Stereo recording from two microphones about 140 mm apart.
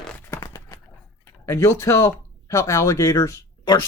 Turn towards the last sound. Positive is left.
turn(degrees=20)  # may be behind; listen again after turning